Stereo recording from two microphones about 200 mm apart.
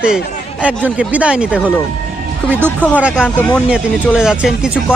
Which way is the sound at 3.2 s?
10° left (ahead or behind).